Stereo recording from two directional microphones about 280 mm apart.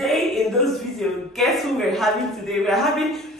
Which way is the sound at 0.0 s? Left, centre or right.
Centre.